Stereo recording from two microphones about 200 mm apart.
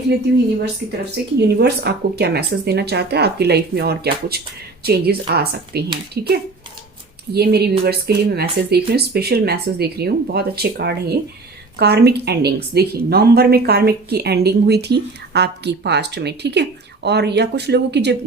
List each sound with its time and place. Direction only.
1.4 s a woman's voice: 55° right (ahead or behind)
7.3 s a woman's voice: 50° right (ahead or behind)